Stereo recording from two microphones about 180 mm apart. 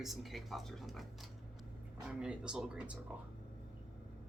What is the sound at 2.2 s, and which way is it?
Speech, 5° right (ahead or behind).